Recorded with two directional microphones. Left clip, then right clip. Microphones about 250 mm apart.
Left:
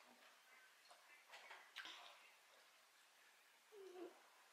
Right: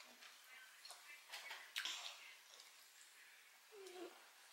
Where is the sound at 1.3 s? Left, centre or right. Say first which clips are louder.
Right 8 dB; centre.